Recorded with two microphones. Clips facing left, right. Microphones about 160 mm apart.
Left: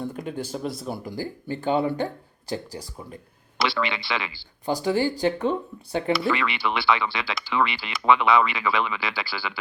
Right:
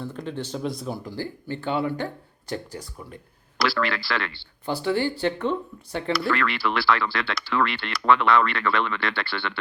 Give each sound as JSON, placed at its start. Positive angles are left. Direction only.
{"t": 0.0, "sound": "speech", "side_deg": 10}
{"t": 3.6, "sound": "speech", "side_deg": 0}
{"t": 4.6, "sound": "speech", "side_deg": 15}
{"t": 6.1, "sound": "speech", "side_deg": 0}